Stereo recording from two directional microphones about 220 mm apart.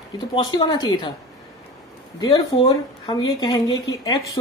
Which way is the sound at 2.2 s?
20° left (ahead or behind).